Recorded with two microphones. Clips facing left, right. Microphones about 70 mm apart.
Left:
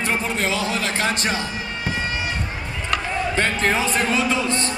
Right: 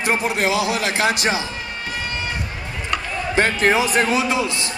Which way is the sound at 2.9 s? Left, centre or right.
Centre.